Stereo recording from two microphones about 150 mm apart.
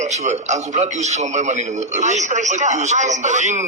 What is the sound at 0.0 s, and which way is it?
A man's voice, 50° right (ahead or behind).